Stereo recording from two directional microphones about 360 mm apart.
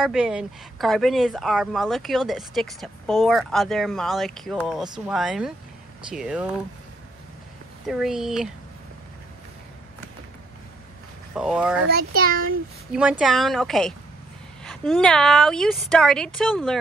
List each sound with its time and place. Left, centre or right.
0.0 s speech: centre
7.8 s speech: centre
11.3 s speech: centre
11.9 s a child's voice: right
13.2 s speech: centre